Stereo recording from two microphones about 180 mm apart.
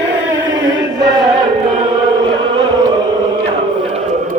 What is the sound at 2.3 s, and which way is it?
Music, 25° right (ahead or behind).